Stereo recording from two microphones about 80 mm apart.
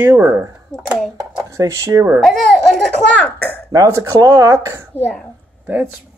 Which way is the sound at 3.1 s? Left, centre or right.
Left.